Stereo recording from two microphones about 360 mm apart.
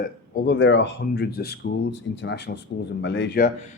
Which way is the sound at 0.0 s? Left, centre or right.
Left.